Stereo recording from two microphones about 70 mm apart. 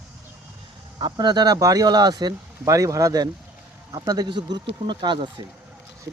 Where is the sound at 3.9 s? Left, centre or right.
Right.